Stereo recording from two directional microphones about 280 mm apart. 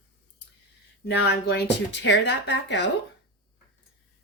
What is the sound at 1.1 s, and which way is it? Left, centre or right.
Speech, left.